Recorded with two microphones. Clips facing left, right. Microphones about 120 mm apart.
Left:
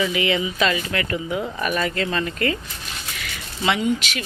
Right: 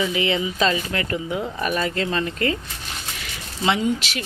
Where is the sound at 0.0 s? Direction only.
30° right (ahead or behind).